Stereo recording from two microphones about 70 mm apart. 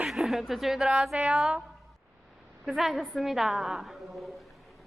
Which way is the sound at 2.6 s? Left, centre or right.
Centre.